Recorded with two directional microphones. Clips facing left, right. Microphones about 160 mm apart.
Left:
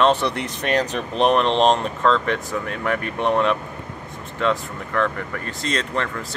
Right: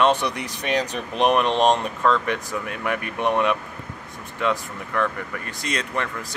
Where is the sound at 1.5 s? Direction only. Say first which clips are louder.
Left 2 dB; 25° left (ahead or behind).